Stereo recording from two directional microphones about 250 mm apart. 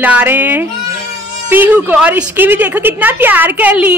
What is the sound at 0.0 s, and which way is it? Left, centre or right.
A woman's voice, centre.